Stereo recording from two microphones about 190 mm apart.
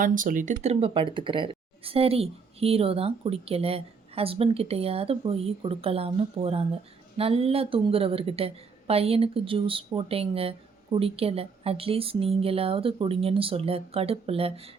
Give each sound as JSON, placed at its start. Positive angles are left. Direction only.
{"t": 0.0, "sound": "speech", "side_deg": -45}